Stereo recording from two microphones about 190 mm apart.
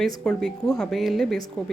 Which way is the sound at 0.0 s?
Centre (ahead or behind).